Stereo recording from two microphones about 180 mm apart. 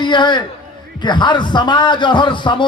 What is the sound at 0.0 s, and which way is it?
A man's voice, 25° left (ahead or behind).